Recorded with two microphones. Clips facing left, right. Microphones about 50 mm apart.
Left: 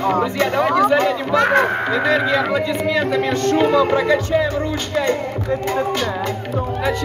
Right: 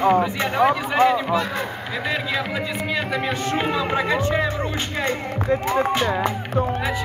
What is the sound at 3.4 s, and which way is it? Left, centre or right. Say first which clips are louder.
Speech: left 10 dB; right.